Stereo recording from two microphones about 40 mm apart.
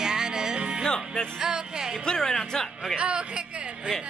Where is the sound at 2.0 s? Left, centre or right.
Centre.